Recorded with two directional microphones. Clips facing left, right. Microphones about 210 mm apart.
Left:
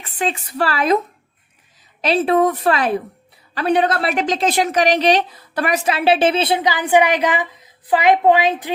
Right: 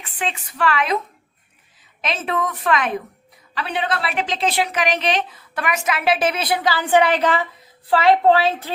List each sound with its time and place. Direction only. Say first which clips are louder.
0.2 s a woman's voice: left 3 dB; 40° left (ahead or behind)
2.0 s a woman's voice: left 9 dB; 35° left (ahead or behind)
3.5 s a woman's voice: left 7 dB; 45° left (ahead or behind); by 8.7 s 15° left (ahead or behind)